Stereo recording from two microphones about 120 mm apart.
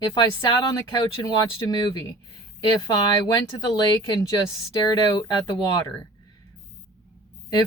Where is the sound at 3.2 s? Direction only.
35° left (ahead or behind).